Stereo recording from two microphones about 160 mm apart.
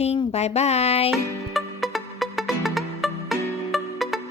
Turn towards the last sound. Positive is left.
turn(degrees=0)  # may be behind; listen again after turning